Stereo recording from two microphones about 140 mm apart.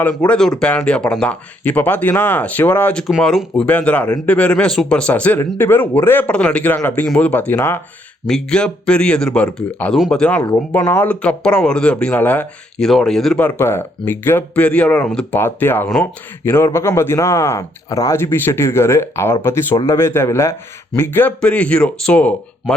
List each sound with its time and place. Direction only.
0.0 s speech: 10° left (ahead or behind)